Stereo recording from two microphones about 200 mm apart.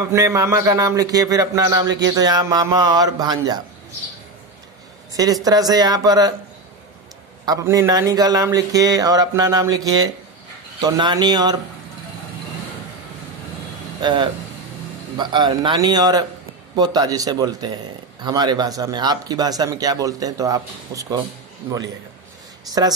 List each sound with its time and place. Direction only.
0.1 s a man's voice: 15° right (ahead or behind)
5.1 s a man's voice: 20° right (ahead or behind)
7.4 s a man's voice: 15° right (ahead or behind)
14.0 s a man's voice: 20° right (ahead or behind)